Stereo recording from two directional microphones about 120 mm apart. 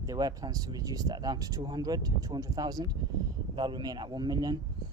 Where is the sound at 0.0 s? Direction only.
30° right (ahead or behind).